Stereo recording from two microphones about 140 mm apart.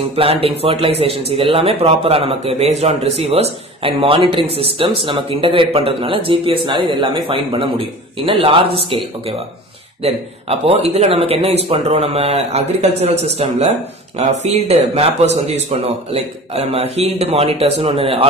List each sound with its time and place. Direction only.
0.1 s a man's voice: 45° right (ahead or behind)